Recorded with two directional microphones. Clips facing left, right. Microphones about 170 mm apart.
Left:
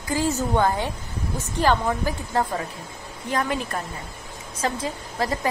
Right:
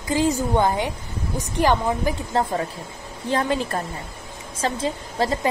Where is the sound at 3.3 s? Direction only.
30° right (ahead or behind).